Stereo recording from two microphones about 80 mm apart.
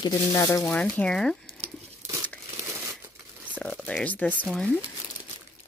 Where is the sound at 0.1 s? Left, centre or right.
Left.